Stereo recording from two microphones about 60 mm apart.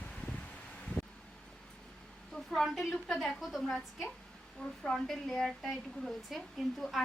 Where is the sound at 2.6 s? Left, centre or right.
Centre.